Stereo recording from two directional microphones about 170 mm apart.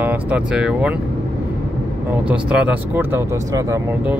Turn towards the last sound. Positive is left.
turn(degrees=-15)  # may be behind; listen again after turning